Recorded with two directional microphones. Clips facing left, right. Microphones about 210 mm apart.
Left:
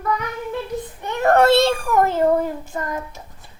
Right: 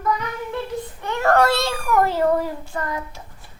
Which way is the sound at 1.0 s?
20° left (ahead or behind).